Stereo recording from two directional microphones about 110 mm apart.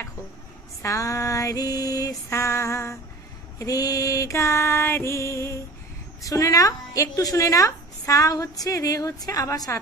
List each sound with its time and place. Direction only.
0.8 s a woman's voice: 30° left (ahead or behind)
2.2 s a sound: 25° left (ahead or behind)
6.2 s a woman's voice: 30° left (ahead or behind)